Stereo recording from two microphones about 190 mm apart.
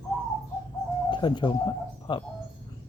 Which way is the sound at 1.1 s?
25° left (ahead or behind).